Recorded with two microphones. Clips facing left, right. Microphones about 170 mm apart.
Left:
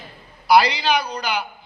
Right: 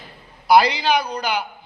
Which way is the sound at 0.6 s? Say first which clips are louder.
Right 1 dB; 50° right (ahead or behind).